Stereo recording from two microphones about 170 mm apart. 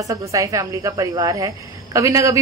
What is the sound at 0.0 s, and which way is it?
A woman's voice, 20° right (ahead or behind).